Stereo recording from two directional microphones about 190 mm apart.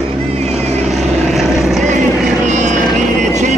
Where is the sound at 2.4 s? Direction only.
40° right (ahead or behind).